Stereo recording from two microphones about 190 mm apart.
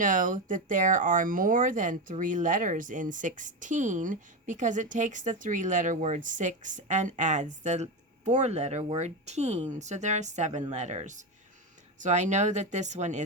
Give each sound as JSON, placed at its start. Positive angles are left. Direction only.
{"t": 0.0, "sound": "speech", "side_deg": -45}